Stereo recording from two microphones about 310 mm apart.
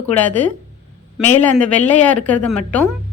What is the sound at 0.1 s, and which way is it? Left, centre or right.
Speech, centre.